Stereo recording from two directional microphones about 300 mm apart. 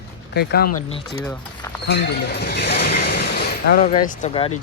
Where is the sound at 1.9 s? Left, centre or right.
Left.